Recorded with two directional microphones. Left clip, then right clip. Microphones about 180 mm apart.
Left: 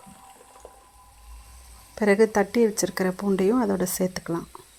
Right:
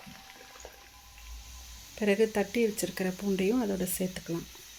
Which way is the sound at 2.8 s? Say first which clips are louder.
Left 7 dB; 25° left (ahead or behind).